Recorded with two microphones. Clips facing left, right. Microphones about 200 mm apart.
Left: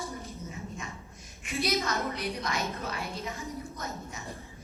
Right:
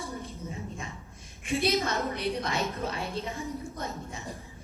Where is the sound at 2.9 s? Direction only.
30° right (ahead or behind).